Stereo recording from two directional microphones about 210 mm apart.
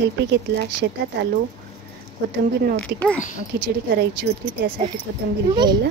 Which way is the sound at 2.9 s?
50° right (ahead or behind).